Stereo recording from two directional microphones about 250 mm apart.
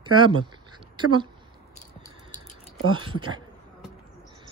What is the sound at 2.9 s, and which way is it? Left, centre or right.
Speech, centre.